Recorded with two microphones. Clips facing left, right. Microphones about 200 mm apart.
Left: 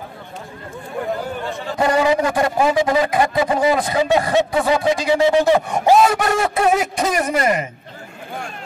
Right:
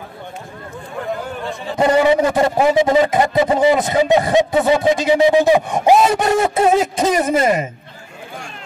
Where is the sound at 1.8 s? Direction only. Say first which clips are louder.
Right 3 dB; 25° right (ahead or behind).